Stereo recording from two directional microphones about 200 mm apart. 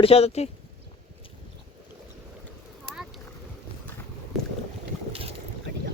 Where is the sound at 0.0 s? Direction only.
30° left (ahead or behind).